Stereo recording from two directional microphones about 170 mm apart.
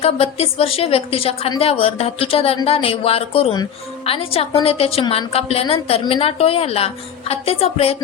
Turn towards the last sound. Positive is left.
turn(degrees=35)  # may be behind; listen again after turning